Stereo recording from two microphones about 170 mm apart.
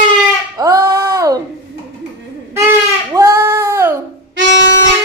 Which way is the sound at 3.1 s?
15° right (ahead or behind).